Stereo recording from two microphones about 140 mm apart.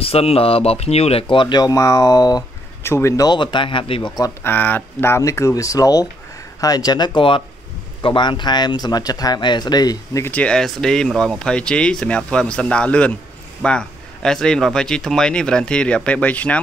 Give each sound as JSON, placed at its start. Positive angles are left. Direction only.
{"t": 0.0, "sound": "speech", "side_deg": 45}
{"t": 4.2, "sound": "speech", "side_deg": 15}
{"t": 10.2, "sound": "speech", "side_deg": 10}